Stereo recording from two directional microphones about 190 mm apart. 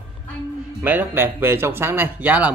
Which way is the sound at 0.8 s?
10° right (ahead or behind).